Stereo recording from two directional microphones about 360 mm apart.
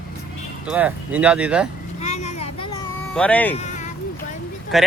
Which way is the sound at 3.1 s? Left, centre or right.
Centre.